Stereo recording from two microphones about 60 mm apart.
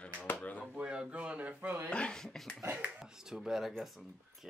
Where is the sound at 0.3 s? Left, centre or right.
Left.